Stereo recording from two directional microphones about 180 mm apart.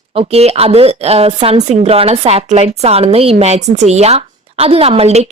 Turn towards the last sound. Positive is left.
turn(degrees=-35)  # may be behind; listen again after turning